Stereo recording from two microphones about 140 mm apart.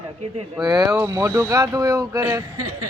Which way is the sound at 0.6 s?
25° right (ahead or behind).